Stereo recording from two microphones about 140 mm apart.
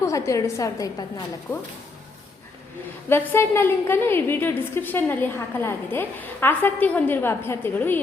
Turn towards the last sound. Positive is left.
turn(degrees=15)  # may be behind; listen again after turning